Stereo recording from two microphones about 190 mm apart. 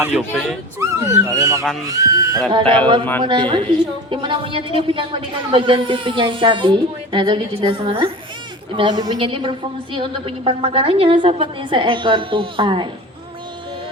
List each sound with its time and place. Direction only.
0.0 s speech: 5° right (ahead or behind)
0.8 s a woman's voice: 15° right (ahead or behind)